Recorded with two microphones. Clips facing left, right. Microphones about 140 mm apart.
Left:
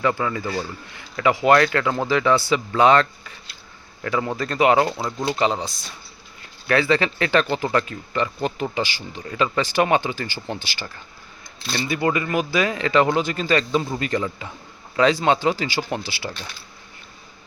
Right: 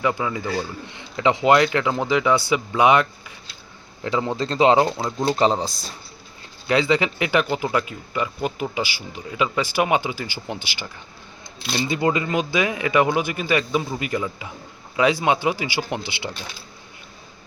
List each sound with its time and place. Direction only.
0.0 s speech: 10° right (ahead or behind)
0.9 s speech: 20° right (ahead or behind)
5.2 s speech: 35° right (ahead or behind)
6.7 s speech: 15° right (ahead or behind)